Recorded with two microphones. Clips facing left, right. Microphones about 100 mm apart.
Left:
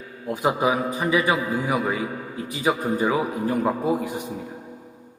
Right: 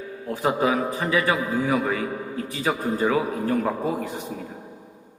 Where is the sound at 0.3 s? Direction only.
15° left (ahead or behind).